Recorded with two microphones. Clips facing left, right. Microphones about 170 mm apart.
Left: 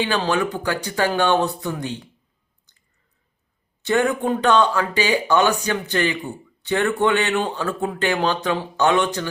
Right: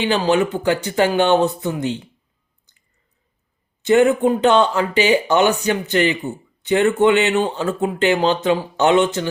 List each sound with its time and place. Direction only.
0.0 s speech: 20° right (ahead or behind)
3.8 s speech: 20° right (ahead or behind)